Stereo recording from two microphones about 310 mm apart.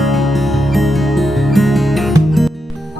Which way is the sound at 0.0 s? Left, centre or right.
Centre.